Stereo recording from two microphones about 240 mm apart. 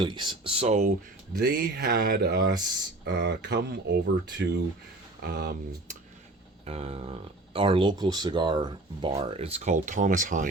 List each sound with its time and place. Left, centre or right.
0.0 s speech: centre
1.4 s speech: right
6.7 s speech: right